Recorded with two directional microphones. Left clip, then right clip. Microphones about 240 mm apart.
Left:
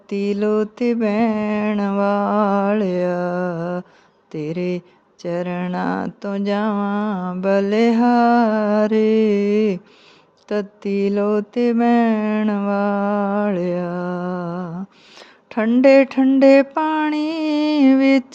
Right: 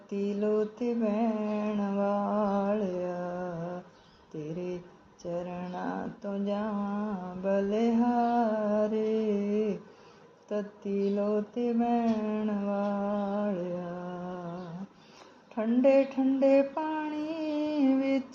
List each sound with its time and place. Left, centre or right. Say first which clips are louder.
0.1 s speech: left 10 dB; left
4.3 s mantra: left 13 dB; left
5.2 s speech: left 12 dB; left